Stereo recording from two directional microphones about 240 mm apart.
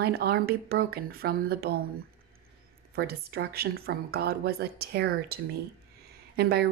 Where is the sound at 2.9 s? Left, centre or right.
Right.